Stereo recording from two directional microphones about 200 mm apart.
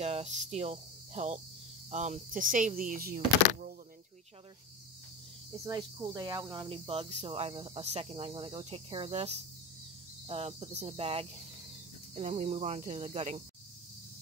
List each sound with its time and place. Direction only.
0.0 s speech: 30° right (ahead or behind)
5.7 s speech: 20° right (ahead or behind)